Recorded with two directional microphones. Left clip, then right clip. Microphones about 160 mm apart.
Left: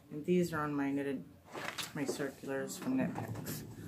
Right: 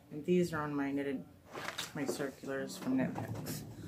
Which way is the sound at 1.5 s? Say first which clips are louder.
Even; 20° left (ahead or behind).